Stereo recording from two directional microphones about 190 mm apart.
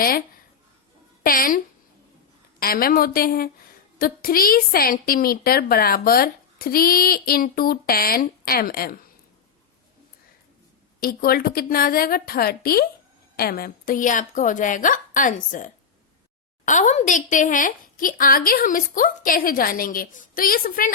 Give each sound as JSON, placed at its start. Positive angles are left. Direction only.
{"t": 1.2, "sound": "a woman's voice", "side_deg": 50}
{"t": 11.0, "sound": "a woman's voice", "side_deg": 50}